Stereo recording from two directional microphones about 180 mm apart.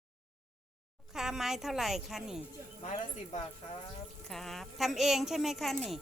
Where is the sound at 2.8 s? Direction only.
40° left (ahead or behind).